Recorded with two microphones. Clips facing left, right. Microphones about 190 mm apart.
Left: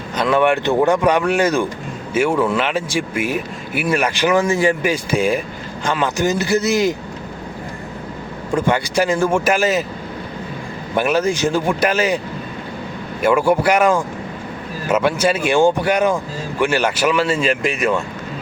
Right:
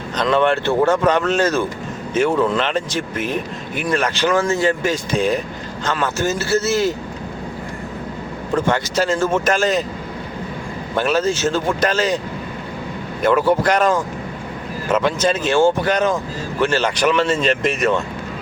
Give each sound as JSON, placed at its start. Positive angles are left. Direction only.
{"t": 0.2, "sound": "speech", "side_deg": 10}
{"t": 8.5, "sound": "speech", "side_deg": 10}
{"t": 10.9, "sound": "speech", "side_deg": 10}
{"t": 13.2, "sound": "speech", "side_deg": 10}